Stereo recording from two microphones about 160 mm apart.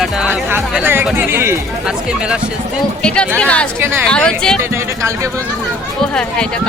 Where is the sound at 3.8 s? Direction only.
15° right (ahead or behind).